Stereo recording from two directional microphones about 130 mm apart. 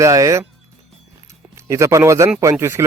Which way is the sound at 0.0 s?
25° right (ahead or behind).